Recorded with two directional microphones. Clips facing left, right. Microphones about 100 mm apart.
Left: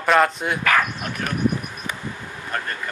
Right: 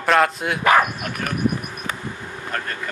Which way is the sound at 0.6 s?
20° right (ahead or behind).